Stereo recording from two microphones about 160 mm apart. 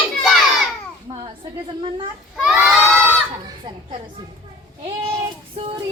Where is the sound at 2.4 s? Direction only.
5° right (ahead or behind).